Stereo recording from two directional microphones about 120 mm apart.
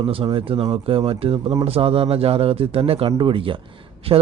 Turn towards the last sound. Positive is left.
turn(degrees=-55)  # may be behind; listen again after turning